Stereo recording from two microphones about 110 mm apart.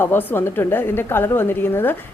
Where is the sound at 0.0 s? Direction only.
20° left (ahead or behind).